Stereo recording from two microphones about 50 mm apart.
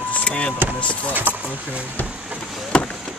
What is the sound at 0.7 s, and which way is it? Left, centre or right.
Speech, left.